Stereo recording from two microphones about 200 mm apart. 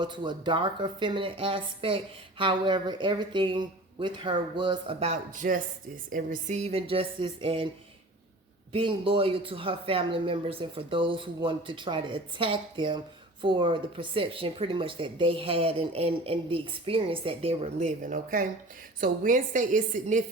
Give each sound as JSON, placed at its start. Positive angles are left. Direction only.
{"t": 0.0, "sound": "speech", "side_deg": -25}
{"t": 8.7, "sound": "a woman's voice", "side_deg": -25}